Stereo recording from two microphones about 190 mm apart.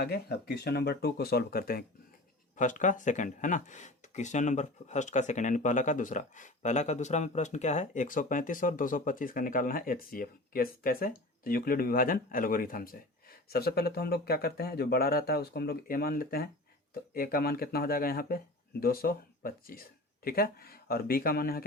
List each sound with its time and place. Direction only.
0.0 s speech: 60° left (ahead or behind)